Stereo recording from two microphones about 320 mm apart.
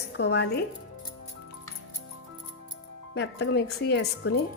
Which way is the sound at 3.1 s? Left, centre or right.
Left.